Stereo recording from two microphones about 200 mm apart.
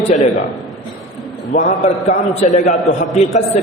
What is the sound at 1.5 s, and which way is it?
A man's voice, 35° left (ahead or behind).